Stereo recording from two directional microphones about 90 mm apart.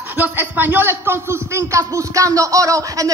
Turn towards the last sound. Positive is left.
turn(degrees=-40)  # may be behind; listen again after turning